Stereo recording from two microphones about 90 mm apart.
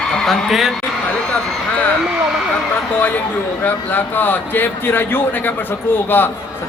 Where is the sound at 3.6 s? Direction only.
20° left (ahead or behind).